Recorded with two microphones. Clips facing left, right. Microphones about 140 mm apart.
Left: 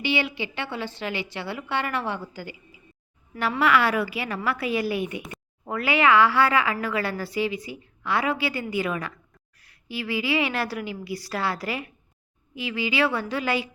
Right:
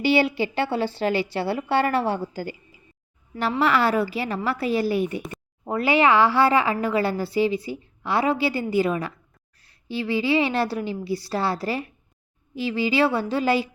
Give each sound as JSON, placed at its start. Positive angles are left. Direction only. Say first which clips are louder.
{"t": 0.0, "sound": "a woman's voice", "louder": "right 6 dB", "side_deg": -35}